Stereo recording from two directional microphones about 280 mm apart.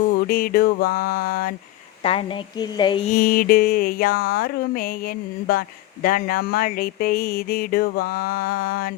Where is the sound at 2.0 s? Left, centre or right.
Centre.